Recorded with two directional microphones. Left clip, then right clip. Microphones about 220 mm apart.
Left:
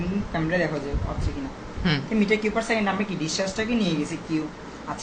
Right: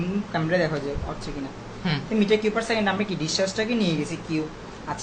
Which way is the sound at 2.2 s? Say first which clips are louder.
Right 1 dB; 20° right (ahead or behind).